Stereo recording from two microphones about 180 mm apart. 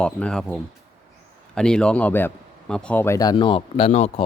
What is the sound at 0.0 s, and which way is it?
A man's voice, 5° left (ahead or behind).